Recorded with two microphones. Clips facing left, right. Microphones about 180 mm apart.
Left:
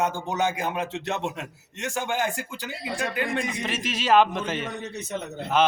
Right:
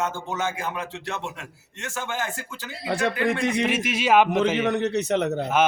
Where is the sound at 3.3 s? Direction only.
70° right (ahead or behind).